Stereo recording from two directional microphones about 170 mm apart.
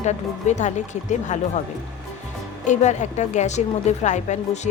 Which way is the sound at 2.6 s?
45° left (ahead or behind).